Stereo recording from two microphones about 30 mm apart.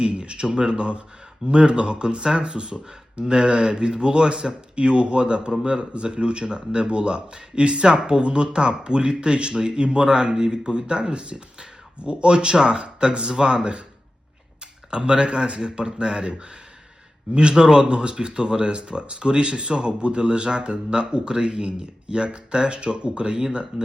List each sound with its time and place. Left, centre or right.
0.0 s speech: right
7.9 s speech: right
14.8 s speech: right
17.3 s speech: right